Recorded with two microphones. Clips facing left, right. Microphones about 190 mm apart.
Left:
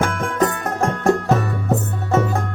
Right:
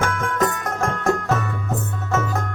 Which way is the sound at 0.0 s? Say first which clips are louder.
Left 2 dB; 30° left (ahead or behind).